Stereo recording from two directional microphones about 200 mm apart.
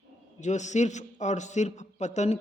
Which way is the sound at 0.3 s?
35° left (ahead or behind).